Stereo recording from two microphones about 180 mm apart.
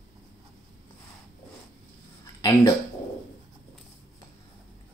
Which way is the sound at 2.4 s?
20° left (ahead or behind).